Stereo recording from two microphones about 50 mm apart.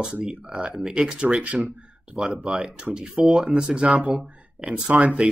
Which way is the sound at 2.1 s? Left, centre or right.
Centre.